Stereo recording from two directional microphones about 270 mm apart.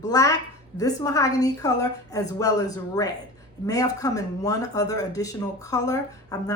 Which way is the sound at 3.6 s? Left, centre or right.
Centre.